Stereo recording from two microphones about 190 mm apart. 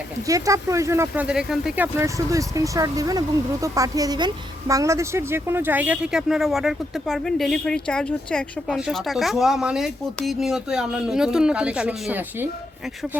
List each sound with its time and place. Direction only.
0.3 s speech: 15° right (ahead or behind)